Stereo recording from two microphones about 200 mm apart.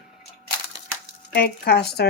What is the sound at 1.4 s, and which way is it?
Speech, 50° left (ahead or behind).